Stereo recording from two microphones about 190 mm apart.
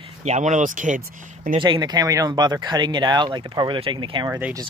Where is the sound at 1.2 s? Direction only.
40° right (ahead or behind).